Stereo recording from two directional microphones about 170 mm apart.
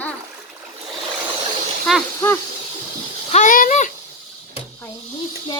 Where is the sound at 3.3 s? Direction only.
45° left (ahead or behind).